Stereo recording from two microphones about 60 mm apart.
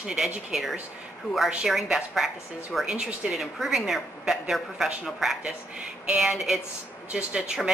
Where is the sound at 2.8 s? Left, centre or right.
Centre.